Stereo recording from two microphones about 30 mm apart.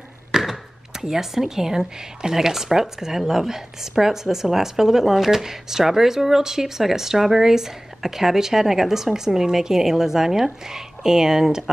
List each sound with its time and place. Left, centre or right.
0.3 s chop: centre
0.9 s a woman's voice: centre